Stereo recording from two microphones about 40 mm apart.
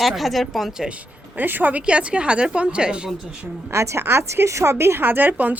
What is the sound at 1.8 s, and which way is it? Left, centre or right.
A woman's voice, right.